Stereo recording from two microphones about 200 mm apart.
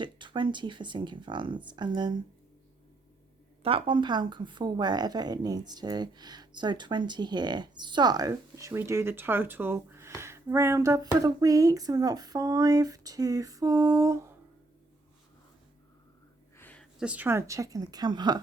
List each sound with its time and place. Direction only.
0.0 s a woman's voice: 25° right (ahead or behind)
3.6 s a woman's voice: 25° right (ahead or behind)
16.6 s a sound: 10° left (ahead or behind)
17.0 s speech: 5° right (ahead or behind)